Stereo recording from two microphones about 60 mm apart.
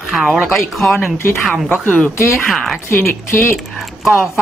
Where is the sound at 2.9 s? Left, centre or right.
Left.